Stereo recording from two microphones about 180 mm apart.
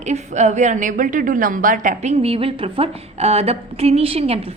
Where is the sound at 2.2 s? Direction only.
30° right (ahead or behind).